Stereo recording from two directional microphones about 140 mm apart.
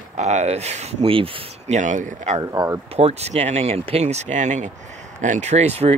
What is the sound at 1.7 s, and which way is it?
Speech, 65° right (ahead or behind).